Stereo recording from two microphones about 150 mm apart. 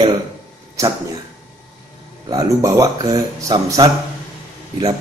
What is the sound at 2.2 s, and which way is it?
Speech, 25° right (ahead or behind).